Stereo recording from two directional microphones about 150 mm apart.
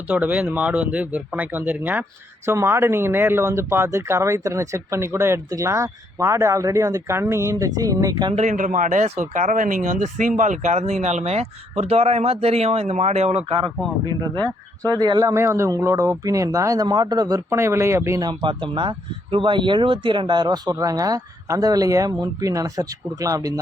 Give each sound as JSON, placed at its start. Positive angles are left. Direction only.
{"t": 0.1, "sound": "speech", "side_deg": -10}
{"t": 8.3, "sound": "speech", "side_deg": -55}
{"t": 14.0, "sound": "speech", "side_deg": -25}